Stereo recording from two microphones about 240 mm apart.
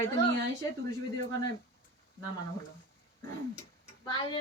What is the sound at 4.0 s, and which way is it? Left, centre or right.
Speech, centre.